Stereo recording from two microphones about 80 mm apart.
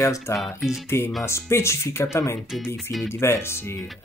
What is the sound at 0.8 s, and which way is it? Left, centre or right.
Speech, left.